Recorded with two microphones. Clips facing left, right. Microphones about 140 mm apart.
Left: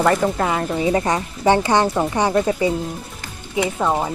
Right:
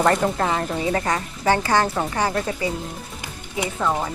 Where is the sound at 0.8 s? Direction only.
20° left (ahead or behind).